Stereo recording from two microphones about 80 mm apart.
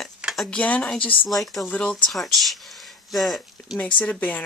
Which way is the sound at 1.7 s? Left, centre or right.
Centre.